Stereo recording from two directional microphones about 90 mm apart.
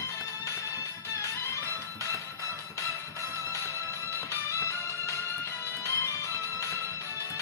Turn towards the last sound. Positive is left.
turn(degrees=35)  # may be behind; listen again after turning